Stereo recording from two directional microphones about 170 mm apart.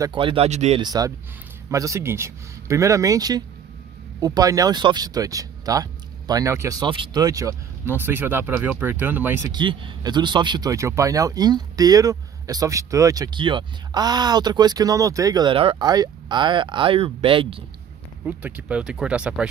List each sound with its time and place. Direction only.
0.0 s speech: 30° right (ahead or behind)
0.7 s speech: 20° right (ahead or behind)
9.5 s speech: 30° right (ahead or behind)
18.2 s speech: 10° right (ahead or behind)